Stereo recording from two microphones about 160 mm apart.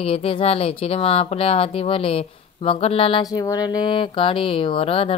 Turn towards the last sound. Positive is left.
turn(degrees=35)  # may be behind; listen again after turning